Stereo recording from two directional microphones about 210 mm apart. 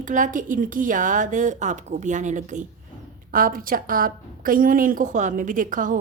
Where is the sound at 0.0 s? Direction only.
35° right (ahead or behind).